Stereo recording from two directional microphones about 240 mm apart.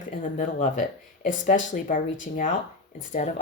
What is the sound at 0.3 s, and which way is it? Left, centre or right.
Speech, left.